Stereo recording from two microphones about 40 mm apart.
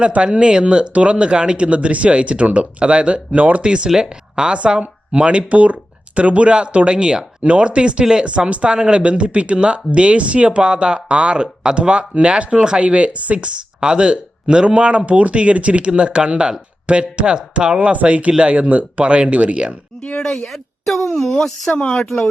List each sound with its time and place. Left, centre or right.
0.3 s speech: right
3.8 s speech: centre
4.4 s speech: right
20.1 s speech: centre
20.5 s speech: centre